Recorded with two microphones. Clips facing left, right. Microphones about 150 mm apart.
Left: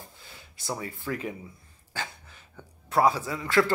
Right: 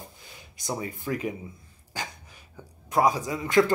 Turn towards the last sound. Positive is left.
turn(degrees=-20)  # may be behind; listen again after turning